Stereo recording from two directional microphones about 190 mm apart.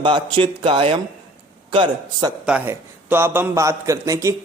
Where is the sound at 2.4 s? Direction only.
10° right (ahead or behind).